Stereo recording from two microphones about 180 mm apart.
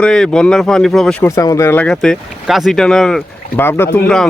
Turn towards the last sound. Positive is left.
turn(degrees=5)  # may be behind; listen again after turning